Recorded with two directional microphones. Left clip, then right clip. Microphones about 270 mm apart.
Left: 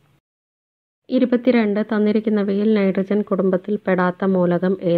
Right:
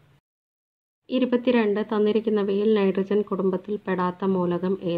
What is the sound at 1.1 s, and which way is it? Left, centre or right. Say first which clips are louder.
Speech: left 5 dB; left.